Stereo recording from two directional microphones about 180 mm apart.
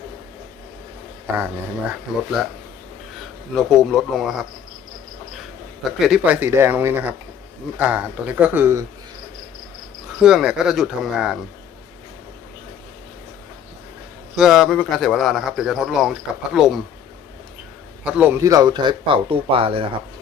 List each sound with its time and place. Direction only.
2.1 s speech: centre (ahead or behind)
3.5 s speech: centre (ahead or behind)
6.0 s speech: 5° right (ahead or behind)
10.1 s speech: 5° right (ahead or behind)
14.3 s speech: centre (ahead or behind)
18.0 s speech: 10° right (ahead or behind); by 19.9 s 30° right (ahead or behind)